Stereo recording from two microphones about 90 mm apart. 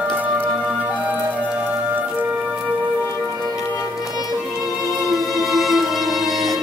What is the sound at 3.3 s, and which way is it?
Music, 50° right (ahead or behind).